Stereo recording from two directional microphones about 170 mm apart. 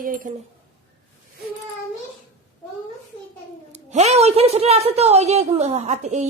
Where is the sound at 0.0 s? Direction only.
55° right (ahead or behind).